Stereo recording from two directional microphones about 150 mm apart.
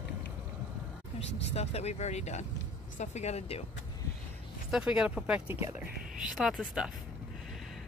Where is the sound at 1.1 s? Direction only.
45° left (ahead or behind).